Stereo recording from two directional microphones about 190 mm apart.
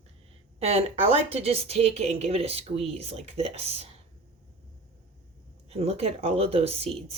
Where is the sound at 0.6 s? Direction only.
35° right (ahead or behind).